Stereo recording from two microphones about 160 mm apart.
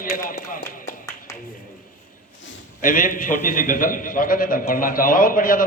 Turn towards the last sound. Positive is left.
turn(degrees=60)  # may be behind; listen again after turning